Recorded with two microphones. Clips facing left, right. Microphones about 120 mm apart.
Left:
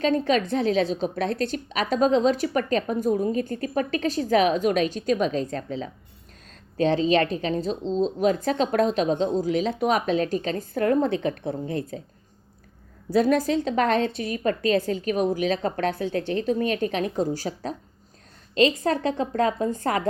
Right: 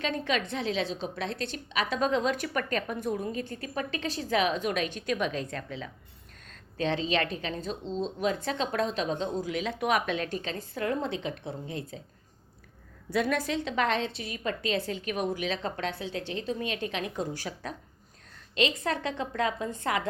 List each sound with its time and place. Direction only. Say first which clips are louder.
0.0 s a woman's voice: left 8 dB; 40° left (ahead or behind)
13.1 s a woman's voice: left 8 dB; 40° left (ahead or behind)